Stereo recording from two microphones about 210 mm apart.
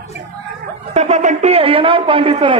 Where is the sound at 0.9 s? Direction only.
35° right (ahead or behind).